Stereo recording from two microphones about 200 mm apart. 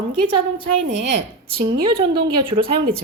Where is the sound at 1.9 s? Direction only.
50° right (ahead or behind).